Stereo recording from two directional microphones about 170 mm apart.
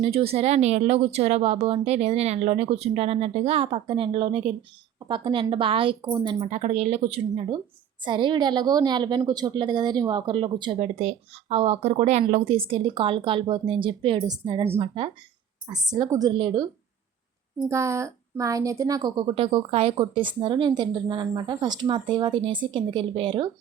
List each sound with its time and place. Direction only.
0.0 s a woman's voice: 35° right (ahead or behind)
17.7 s a woman's voice: 15° right (ahead or behind)